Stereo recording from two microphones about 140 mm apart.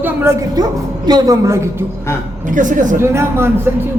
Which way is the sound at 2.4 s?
70° right (ahead or behind).